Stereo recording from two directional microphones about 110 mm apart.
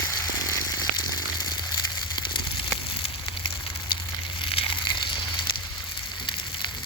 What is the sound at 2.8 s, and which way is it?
Fire, 55° left (ahead or behind).